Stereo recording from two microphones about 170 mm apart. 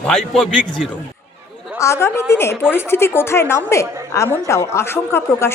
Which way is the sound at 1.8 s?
15° left (ahead or behind).